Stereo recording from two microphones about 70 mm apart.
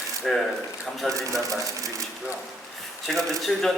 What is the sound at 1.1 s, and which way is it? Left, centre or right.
Speech, right.